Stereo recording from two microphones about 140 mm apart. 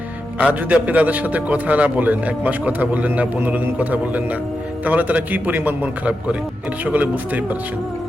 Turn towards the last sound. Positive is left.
turn(degrees=-10)  # may be behind; listen again after turning